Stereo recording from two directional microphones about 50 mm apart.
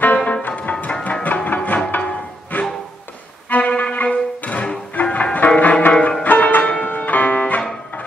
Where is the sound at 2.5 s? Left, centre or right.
Left.